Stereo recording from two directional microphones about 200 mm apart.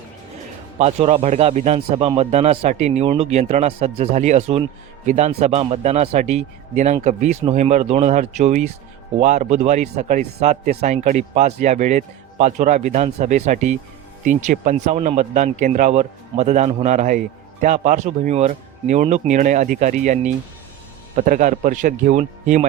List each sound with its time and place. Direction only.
0.8 s a man's voice: 35° right (ahead or behind)